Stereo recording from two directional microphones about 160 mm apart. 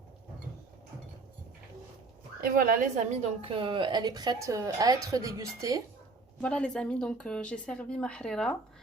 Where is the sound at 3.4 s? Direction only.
35° right (ahead or behind).